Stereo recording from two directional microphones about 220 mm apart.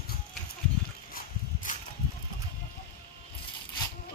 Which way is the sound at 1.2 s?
40° left (ahead or behind).